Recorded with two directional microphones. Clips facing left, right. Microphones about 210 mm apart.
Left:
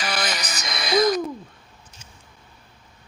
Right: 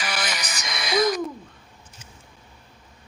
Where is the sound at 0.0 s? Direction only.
40° left (ahead or behind).